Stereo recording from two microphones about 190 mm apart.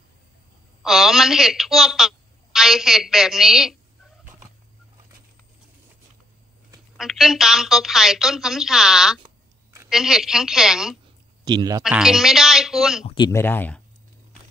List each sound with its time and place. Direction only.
0.8 s a woman's voice: centre (ahead or behind)
7.0 s a woman's voice: centre (ahead or behind)
11.4 s speech: 20° right (ahead or behind)
11.8 s a woman's voice: 5° right (ahead or behind)
13.0 s speech: 25° left (ahead or behind)
13.3 s speech: 10° left (ahead or behind)